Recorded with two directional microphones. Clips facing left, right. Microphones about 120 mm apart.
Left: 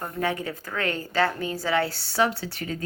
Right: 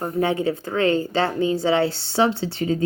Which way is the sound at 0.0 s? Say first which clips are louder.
Right 7 dB; 30° right (ahead or behind).